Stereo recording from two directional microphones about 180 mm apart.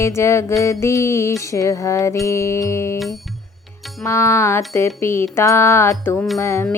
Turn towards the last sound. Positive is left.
turn(degrees=15)  # may be behind; listen again after turning